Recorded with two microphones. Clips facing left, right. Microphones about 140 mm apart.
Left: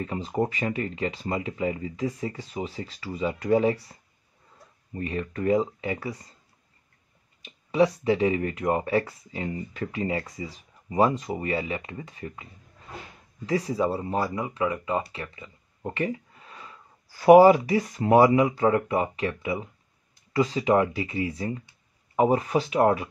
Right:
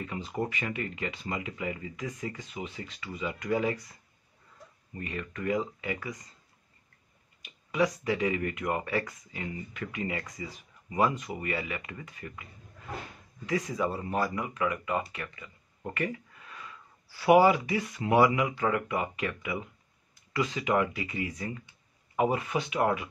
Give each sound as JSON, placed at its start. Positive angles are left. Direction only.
{"t": 0.0, "sound": "speech", "side_deg": 35}
{"t": 7.4, "sound": "speech", "side_deg": 30}
{"t": 13.5, "sound": "speech", "side_deg": 35}
{"t": 17.1, "sound": "speech", "side_deg": 45}